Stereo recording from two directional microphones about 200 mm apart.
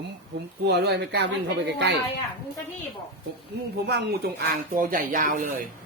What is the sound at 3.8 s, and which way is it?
Music, 55° right (ahead or behind).